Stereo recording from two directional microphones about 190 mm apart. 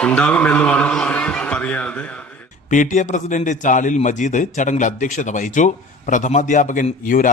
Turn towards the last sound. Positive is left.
turn(degrees=45)  # may be behind; listen again after turning